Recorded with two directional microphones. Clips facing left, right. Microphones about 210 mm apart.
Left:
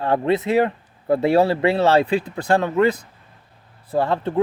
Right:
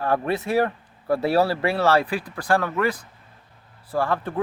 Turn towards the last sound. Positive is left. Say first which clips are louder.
# left 4 dB
turn(degrees=25)  # may be behind; listen again after turning